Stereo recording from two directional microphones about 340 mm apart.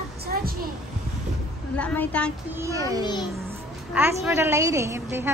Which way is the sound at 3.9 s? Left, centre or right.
Centre.